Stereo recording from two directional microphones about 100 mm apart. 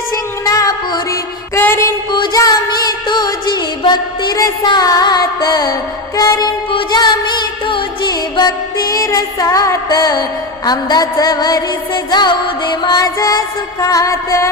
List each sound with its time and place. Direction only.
0.1 s music: 35° left (ahead or behind)
1.5 s music: 25° left (ahead or behind)
2.1 s music: 45° left (ahead or behind)